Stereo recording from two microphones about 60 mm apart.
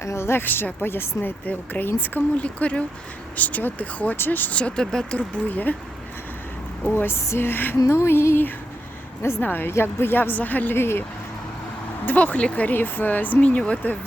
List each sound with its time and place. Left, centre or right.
0.0 s music: left
0.4 s speech: left
1.5 s speech: left
6.8 s speech: left
7.9 s music: left
9.4 s speech: left
12.0 s speech: left